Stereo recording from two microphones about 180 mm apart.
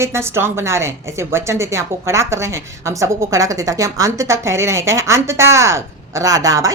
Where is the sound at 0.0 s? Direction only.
15° right (ahead or behind).